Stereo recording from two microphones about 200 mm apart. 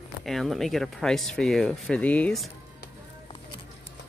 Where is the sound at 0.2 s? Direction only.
Centre (ahead or behind).